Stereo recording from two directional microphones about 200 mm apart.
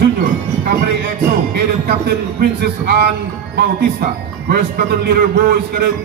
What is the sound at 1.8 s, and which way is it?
A man's voice, 55° right (ahead or behind).